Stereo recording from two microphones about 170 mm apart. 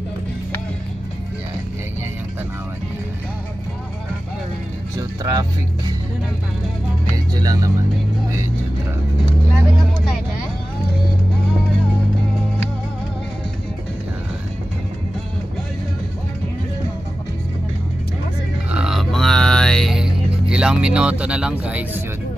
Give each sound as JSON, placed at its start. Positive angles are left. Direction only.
{"t": 4.9, "sound": "speech", "side_deg": -20}
{"t": 7.3, "sound": "speech", "side_deg": -20}
{"t": 18.7, "sound": "music", "side_deg": -5}